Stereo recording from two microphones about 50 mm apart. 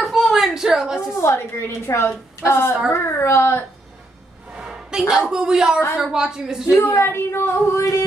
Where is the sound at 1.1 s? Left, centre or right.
Left.